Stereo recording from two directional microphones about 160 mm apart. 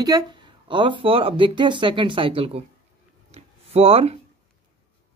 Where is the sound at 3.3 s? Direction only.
40° right (ahead or behind).